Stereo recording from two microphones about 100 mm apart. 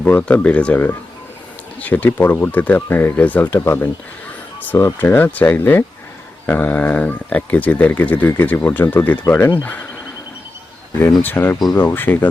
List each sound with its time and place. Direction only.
0.0 s speech: 10° left (ahead or behind)
11.2 s speech: 20° left (ahead or behind)